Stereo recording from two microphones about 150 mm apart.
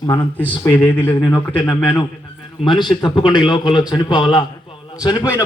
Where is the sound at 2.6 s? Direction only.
35° left (ahead or behind).